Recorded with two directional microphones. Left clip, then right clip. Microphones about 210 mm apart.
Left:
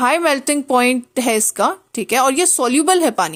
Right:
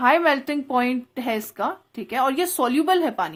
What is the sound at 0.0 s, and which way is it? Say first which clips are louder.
Speech: left 3 dB; 35° left (ahead or behind).